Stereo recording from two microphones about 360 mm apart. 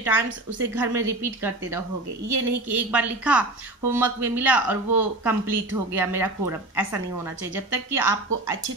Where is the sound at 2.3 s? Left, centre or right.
Right.